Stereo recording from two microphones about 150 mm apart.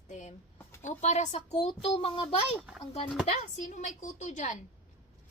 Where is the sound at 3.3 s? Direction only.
55° left (ahead or behind).